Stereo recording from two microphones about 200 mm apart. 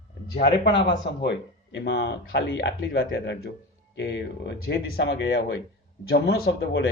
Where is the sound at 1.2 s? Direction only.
60° left (ahead or behind).